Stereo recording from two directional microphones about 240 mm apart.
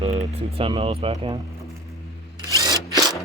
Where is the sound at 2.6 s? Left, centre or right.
Centre.